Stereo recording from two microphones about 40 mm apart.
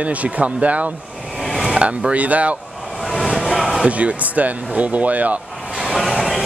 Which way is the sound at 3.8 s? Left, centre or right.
Right.